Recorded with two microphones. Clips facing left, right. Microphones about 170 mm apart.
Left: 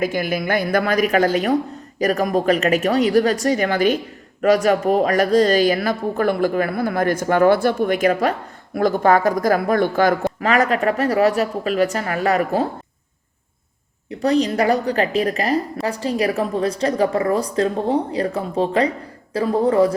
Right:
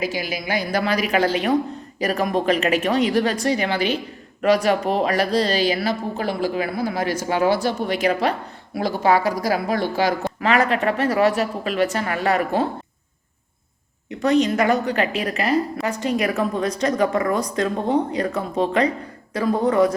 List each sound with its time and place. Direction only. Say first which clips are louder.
0.0 s a woman's voice: left 5 dB; 55° left (ahead or behind)
14.1 s a woman's voice: even; 35° left (ahead or behind)